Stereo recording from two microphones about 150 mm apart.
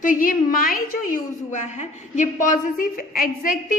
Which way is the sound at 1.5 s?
50° left (ahead or behind).